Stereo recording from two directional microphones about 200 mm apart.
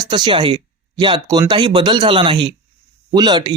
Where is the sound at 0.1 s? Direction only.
25° right (ahead or behind).